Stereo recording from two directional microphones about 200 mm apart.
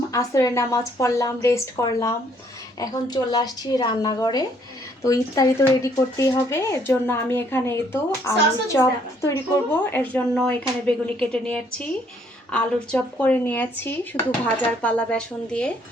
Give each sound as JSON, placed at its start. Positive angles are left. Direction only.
{"t": 0.1, "sound": "a woman's voice", "side_deg": 15}